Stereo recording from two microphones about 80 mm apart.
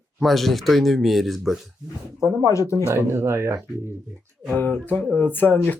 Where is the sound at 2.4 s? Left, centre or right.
Left.